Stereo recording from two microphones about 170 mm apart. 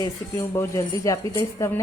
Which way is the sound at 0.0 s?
15° left (ahead or behind).